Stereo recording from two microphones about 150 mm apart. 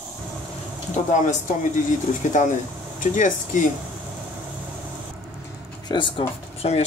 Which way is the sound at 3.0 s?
60° left (ahead or behind).